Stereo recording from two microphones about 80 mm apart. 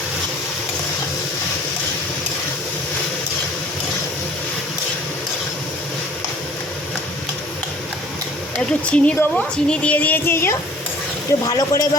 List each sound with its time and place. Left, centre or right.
8.5 s speech: centre; by 10.6 s left
11.4 s speech: left